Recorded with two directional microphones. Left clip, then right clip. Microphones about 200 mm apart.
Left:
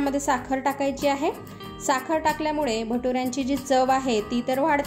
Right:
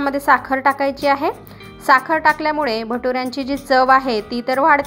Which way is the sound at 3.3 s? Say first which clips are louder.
Right 6 dB; 35° right (ahead or behind).